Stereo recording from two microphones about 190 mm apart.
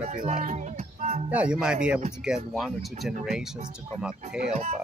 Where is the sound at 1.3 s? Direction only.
5° right (ahead or behind).